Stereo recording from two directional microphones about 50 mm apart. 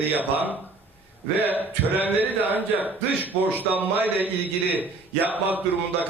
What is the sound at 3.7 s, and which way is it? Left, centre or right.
Speech, right.